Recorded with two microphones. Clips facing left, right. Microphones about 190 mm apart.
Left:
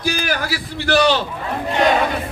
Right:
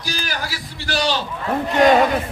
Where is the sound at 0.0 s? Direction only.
55° left (ahead or behind).